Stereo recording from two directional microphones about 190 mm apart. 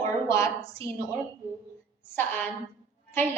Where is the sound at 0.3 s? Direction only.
15° left (ahead or behind).